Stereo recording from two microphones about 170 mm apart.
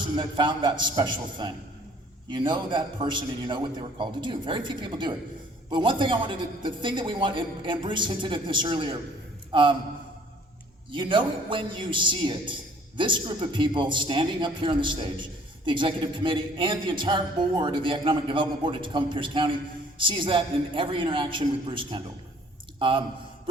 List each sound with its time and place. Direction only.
0.2 s a man's voice: 25° right (ahead or behind)
10.9 s a man's voice: 30° right (ahead or behind)